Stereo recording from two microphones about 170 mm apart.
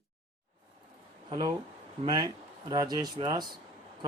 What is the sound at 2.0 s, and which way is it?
Speech, 25° right (ahead or behind).